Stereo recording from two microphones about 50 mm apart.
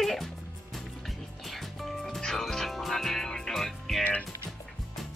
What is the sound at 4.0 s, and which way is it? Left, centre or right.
Music, left.